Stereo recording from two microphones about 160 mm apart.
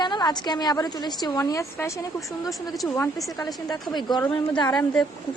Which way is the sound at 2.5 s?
Centre (ahead or behind).